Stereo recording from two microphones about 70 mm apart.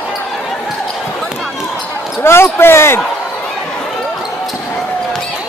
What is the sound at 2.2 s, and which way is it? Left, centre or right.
Speech, left.